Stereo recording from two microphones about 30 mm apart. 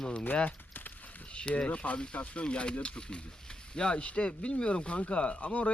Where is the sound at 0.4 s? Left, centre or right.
Left.